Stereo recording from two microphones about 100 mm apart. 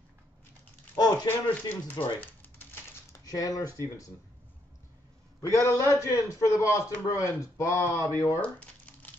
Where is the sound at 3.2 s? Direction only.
35° left (ahead or behind).